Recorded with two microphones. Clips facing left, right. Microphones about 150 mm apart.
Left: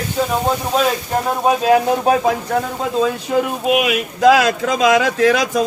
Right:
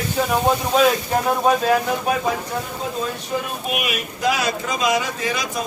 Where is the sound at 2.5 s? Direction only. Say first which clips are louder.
Left 7 dB; 90° left.